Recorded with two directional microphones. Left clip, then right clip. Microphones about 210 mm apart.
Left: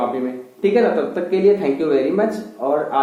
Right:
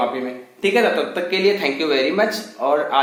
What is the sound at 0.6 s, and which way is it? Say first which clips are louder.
Speech: left 1 dB; 15° right (ahead or behind).